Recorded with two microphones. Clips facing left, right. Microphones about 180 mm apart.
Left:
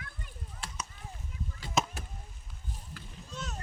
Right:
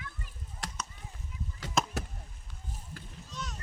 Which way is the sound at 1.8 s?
Centre (ahead or behind).